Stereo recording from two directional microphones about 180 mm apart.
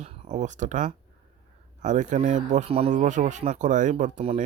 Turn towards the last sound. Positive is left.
turn(degrees=-40)  # may be behind; listen again after turning